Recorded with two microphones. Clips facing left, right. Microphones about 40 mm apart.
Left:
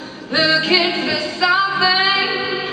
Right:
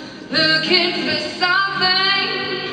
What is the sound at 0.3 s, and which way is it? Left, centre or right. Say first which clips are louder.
Music: left 1 dB; centre.